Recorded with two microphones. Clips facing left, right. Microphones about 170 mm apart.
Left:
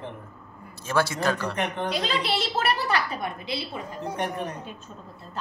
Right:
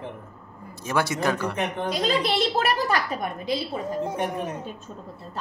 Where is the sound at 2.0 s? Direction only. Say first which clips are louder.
Right 4 dB; 45° right (ahead or behind).